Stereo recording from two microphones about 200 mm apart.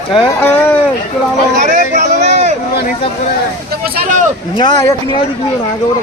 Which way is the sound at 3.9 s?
40° right (ahead or behind).